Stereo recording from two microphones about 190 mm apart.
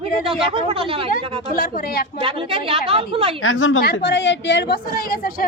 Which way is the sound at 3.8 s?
65° left (ahead or behind).